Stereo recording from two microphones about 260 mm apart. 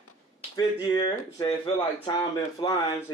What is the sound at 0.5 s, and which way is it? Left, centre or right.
Speech, centre.